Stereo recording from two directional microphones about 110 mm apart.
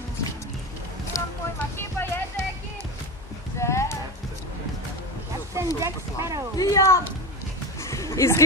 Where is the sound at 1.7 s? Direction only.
20° left (ahead or behind).